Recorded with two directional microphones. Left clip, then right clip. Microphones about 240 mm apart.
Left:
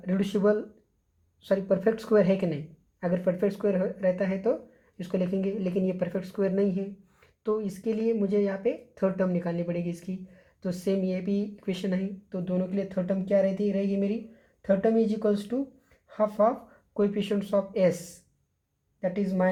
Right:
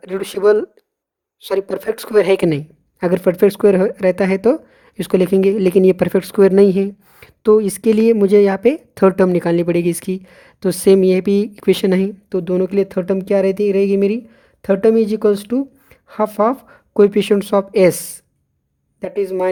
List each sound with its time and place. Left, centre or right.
0.0 s speech: right